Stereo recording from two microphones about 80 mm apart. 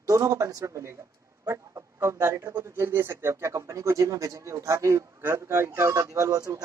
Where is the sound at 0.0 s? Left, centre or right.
Right.